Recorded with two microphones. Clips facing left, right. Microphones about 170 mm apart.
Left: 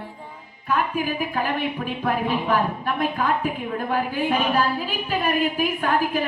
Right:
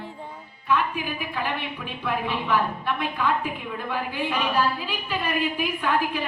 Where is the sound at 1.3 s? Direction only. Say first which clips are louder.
Left 5 dB; 45° left (ahead or behind).